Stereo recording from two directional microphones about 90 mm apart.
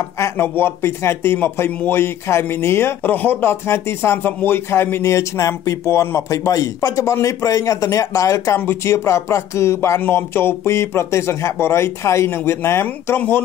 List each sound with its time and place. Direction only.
0.2 s speech: 25° left (ahead or behind)